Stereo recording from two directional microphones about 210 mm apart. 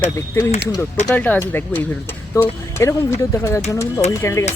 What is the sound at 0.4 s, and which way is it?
Speech, 10° left (ahead or behind).